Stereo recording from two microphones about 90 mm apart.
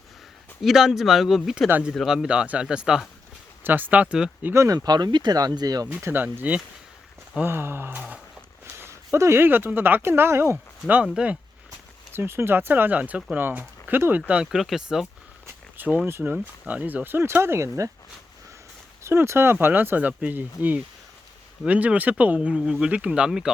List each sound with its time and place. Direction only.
0.6 s speech: 5° right (ahead or behind)
3.6 s speech: 20° right (ahead or behind)
4.5 s speech: 35° right (ahead or behind)
5.9 s speech: 25° right (ahead or behind)
8.6 s a sound: 25° right (ahead or behind)
9.1 s speech: 30° right (ahead or behind)
11.0 s speech: 10° right (ahead or behind)
12.1 s speech: 25° right (ahead or behind)
14.2 s speech: 10° right (ahead or behind)
16.0 s speech: 30° right (ahead or behind)
16.3 s speech: 15° right (ahead or behind); by 17.9 s 35° right (ahead or behind)
19.0 s speech: 30° right (ahead or behind); by 23.5 s 10° right (ahead or behind)